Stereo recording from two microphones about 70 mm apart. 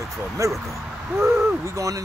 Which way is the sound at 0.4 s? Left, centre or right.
Right.